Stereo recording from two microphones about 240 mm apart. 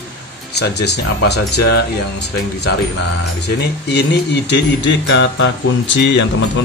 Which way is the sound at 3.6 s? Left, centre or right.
Left.